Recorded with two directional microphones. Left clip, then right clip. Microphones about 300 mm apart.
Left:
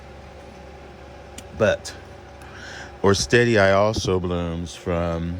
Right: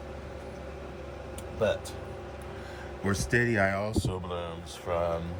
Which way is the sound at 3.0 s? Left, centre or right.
Centre.